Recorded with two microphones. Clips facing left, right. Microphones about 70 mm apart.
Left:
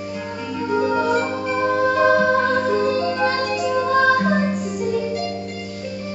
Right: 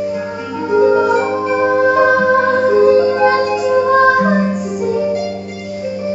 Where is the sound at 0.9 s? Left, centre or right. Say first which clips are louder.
Right 7 dB; centre.